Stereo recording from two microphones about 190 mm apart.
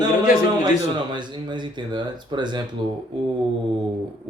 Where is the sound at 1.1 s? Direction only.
25° right (ahead or behind).